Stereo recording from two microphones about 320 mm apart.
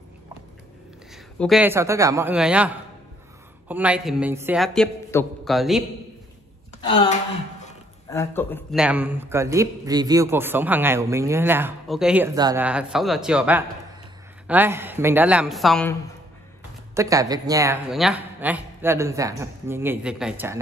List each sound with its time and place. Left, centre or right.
1.1 s a man's voice: centre
6.8 s a man's voice: centre
8.8 s a man's voice: centre
16.9 s a man's voice: centre